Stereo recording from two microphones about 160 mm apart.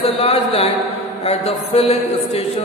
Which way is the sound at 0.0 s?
35° left (ahead or behind).